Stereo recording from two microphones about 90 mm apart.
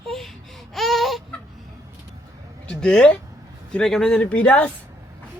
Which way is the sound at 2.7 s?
10° left (ahead or behind).